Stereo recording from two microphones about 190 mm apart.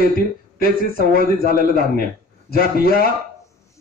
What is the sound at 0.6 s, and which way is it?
A man's voice, 50° left (ahead or behind).